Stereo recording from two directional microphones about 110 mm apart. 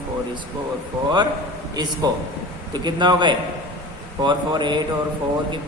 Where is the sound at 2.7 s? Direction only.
40° right (ahead or behind).